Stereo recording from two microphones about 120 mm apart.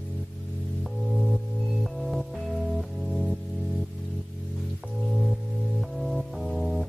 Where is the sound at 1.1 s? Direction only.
Centre (ahead or behind).